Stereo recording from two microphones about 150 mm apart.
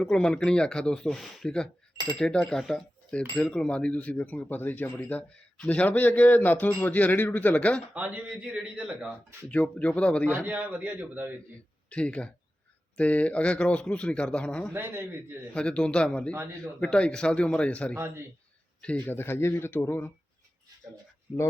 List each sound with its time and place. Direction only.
0.0 s speech: 5° left (ahead or behind)
7.9 s a man's voice: 10° right (ahead or behind)
9.5 s speech: 10° left (ahead or behind)
10.4 s a man's voice: 10° right (ahead or behind)
11.9 s speech: 10° left (ahead or behind)
14.7 s a man's voice: 15° right (ahead or behind)
15.5 s speech: 5° left (ahead or behind)
17.9 s a man's voice: 15° right (ahead or behind)
18.8 s speech: 10° left (ahead or behind)